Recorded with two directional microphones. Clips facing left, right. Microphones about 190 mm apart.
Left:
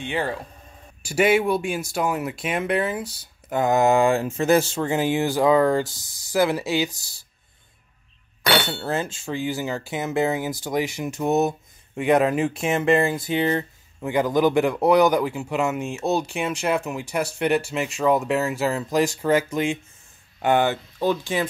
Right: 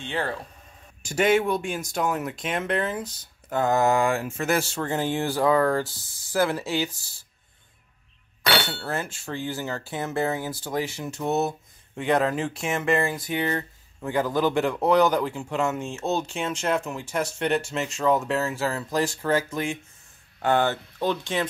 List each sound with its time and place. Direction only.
0.0 s speech: 15° left (ahead or behind)
8.6 s speech: 25° left (ahead or behind)
9.2 s speech: 10° left (ahead or behind)
14.0 s speech: 15° left (ahead or behind)